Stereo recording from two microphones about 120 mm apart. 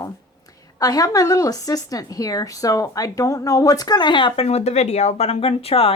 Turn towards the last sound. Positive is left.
turn(degrees=55)  # may be behind; listen again after turning